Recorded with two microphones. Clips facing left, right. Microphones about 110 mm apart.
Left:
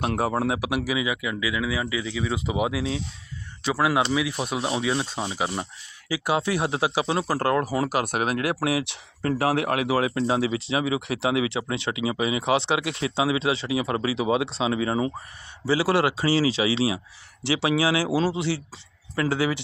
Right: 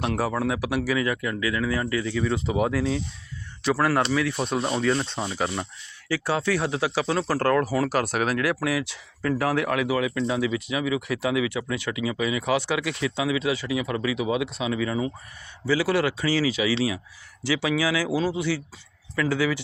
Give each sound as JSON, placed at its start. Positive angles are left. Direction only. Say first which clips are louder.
{"t": 0.2, "sound": "speech", "louder": "left 1 dB", "side_deg": 25}